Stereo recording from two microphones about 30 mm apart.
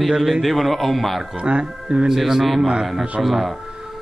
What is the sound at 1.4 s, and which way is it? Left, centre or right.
Speech, right.